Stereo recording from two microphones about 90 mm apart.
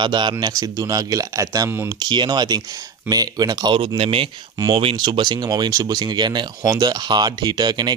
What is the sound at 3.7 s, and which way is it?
Speech, 85° right.